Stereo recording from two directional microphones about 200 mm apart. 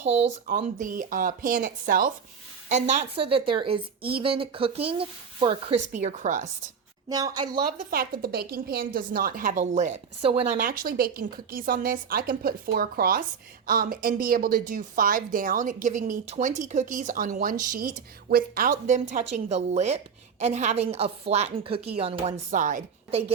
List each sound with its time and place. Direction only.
0.0 s a woman's voice: 35° right (ahead or behind)
5.9 s a woman's voice: 40° right (ahead or behind)
7.1 s a woman's voice: 20° right (ahead or behind)
7.5 s a woman's voice: 45° right (ahead or behind); by 10.6 s 30° right (ahead or behind)
10.6 s a woman's voice: 45° right (ahead or behind)